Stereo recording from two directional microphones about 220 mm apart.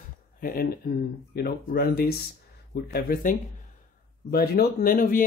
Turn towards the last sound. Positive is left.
turn(degrees=40)  # may be behind; listen again after turning